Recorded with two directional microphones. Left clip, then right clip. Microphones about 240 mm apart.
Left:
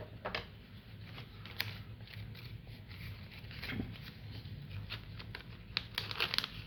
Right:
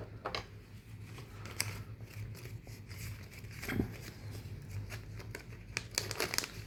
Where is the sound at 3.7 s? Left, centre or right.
Right.